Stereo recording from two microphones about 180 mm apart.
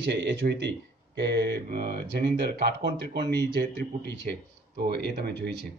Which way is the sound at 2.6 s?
70° right (ahead or behind).